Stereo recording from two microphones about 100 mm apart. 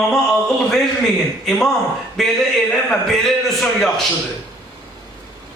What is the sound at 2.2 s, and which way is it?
A man's voice, 5° left (ahead or behind).